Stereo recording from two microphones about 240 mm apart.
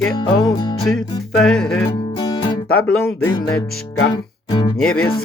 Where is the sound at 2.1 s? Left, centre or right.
Centre.